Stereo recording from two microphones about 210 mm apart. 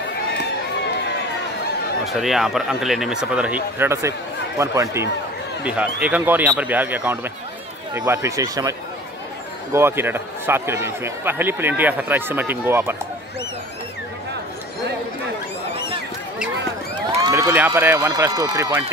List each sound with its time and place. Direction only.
2.1 s speech: centre (ahead or behind)
17.3 s speech: 15° right (ahead or behind)